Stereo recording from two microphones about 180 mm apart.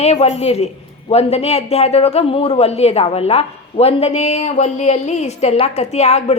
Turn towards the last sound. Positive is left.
turn(degrees=35)  # may be behind; listen again after turning